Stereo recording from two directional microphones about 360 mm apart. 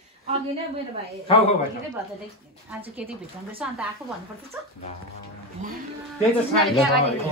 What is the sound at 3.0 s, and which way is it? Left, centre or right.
Speech, centre.